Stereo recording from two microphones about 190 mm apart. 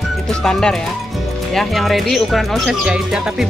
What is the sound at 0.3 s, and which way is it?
Speech, 5° left (ahead or behind).